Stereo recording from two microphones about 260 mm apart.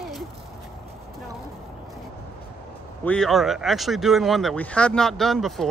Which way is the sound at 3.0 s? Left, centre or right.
Centre.